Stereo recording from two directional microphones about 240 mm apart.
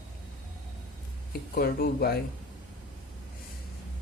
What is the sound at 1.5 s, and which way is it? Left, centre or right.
Speech, left.